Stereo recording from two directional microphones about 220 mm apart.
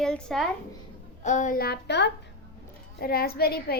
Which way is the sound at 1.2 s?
35° left (ahead or behind).